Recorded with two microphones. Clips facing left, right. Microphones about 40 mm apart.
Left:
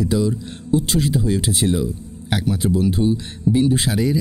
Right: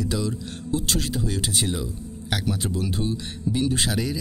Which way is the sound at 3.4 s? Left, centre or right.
Centre.